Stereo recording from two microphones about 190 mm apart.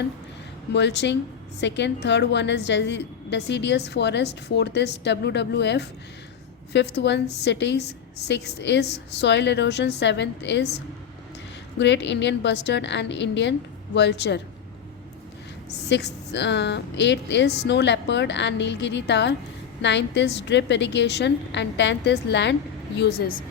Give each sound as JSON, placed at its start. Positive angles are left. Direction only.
{"t": 0.7, "sound": "a woman's voice", "side_deg": 65}
{"t": 15.9, "sound": "a woman's voice", "side_deg": 65}
{"t": 23.0, "sound": "a woman's voice", "side_deg": 55}